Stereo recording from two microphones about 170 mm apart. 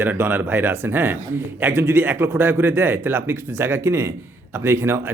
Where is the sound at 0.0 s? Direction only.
10° right (ahead or behind).